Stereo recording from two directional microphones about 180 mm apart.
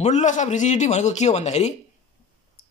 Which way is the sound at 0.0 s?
40° left (ahead or behind).